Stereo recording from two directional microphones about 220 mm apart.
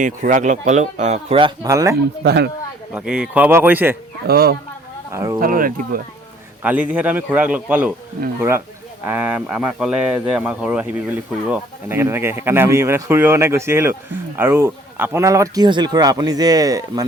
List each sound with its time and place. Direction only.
0.0 s speech: 35° right (ahead or behind); by 2.0 s 15° right (ahead or behind)
2.2 s speech: 50° right (ahead or behind)
2.9 s speech: 5° right (ahead or behind)
4.3 s speech: 45° right (ahead or behind)
5.1 s speech: 10° right (ahead or behind)
5.4 s speech: 40° right (ahead or behind)
6.6 s speech: 5° right (ahead or behind)